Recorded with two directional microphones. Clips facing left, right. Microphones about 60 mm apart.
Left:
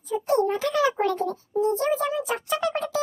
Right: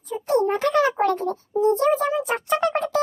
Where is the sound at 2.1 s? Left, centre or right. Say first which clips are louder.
Right 4 dB; right.